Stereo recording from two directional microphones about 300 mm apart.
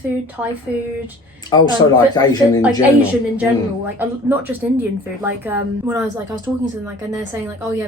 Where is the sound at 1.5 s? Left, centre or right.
Centre.